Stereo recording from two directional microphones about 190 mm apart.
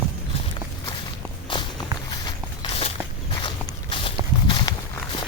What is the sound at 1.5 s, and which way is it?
Walk, 25° left (ahead or behind).